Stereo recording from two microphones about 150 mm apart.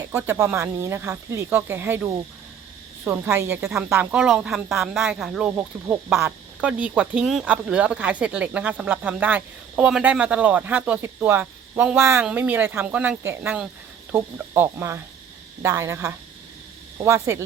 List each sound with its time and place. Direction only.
0.1 s speech: 15° right (ahead or behind)
5.5 s speech: 15° right (ahead or behind)